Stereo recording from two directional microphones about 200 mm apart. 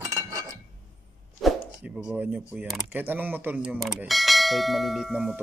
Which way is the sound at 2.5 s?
5° right (ahead or behind).